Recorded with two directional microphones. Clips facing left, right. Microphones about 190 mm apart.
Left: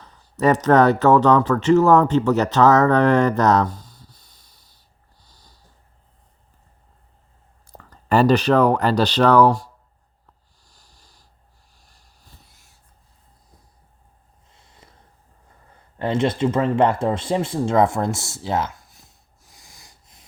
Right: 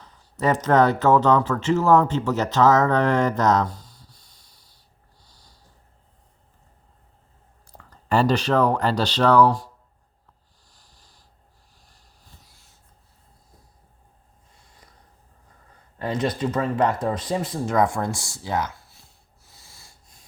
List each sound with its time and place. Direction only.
0.3 s speech: 70° left (ahead or behind)
7.7 s a sound: 75° left (ahead or behind)
8.3 s speech: 55° left (ahead or behind)
16.0 s speech: 25° left (ahead or behind)